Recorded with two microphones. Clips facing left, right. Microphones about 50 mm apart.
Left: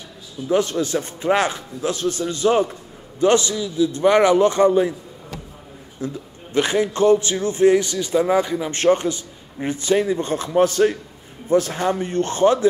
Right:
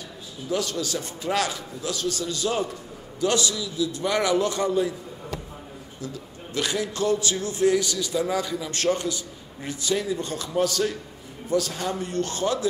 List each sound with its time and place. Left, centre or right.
0.5 s a man's voice: left
5.9 s a man's voice: left